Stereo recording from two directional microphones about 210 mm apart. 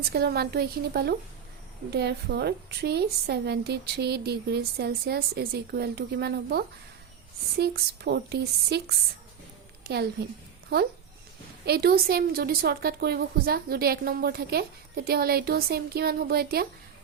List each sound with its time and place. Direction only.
0.1 s a woman's voice: 50° right (ahead or behind)
11.6 s a woman's voice: 50° right (ahead or behind)